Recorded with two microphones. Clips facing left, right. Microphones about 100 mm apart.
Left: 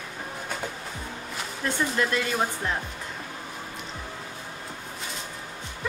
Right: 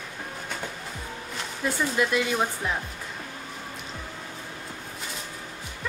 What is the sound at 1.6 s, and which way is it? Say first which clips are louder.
Speech: right 1 dB; 5° right (ahead or behind).